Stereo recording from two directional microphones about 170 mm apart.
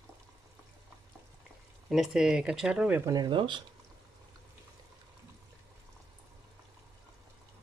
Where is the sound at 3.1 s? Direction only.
25° right (ahead or behind).